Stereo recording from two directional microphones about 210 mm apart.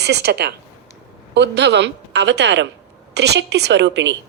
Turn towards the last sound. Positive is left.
turn(degrees=-55)  # may be behind; listen again after turning